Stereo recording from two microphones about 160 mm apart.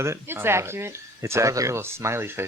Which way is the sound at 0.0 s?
15° right (ahead or behind).